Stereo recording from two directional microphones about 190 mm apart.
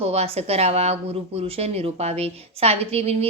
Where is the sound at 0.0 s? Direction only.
35° right (ahead or behind).